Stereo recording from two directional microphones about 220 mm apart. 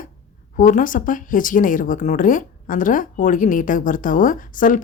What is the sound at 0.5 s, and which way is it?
Speech, 35° left (ahead or behind).